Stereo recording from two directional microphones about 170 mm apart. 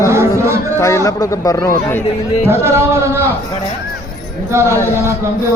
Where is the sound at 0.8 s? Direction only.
15° left (ahead or behind).